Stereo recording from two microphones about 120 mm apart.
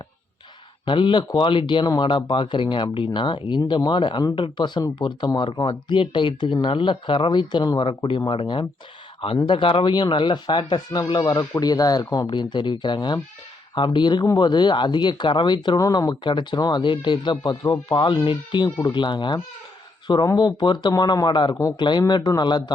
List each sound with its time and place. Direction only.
0.9 s speech: 40° left (ahead or behind)